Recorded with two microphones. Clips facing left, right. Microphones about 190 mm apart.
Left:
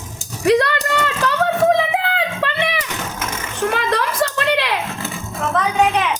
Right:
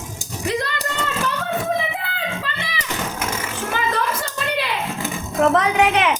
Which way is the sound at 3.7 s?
80° left.